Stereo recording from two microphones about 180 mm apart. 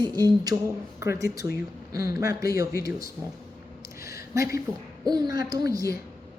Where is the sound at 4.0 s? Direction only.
15° right (ahead or behind).